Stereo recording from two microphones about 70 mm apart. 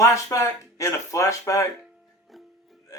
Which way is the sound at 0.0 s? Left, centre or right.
Left.